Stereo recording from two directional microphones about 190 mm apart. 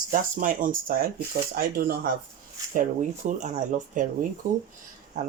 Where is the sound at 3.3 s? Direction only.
40° right (ahead or behind).